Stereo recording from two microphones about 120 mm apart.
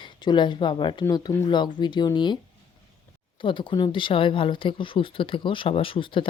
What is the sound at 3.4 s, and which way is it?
Speech, 45° left (ahead or behind).